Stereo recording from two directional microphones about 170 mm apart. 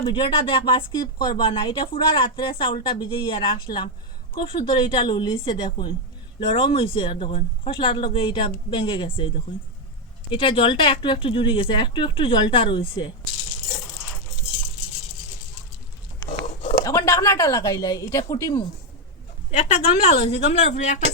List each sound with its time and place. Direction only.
0.0 s speech: 30° left (ahead or behind)
10.3 s speech: 30° left (ahead or behind)
16.8 s speech: 20° left (ahead or behind)
19.5 s speech: 40° left (ahead or behind)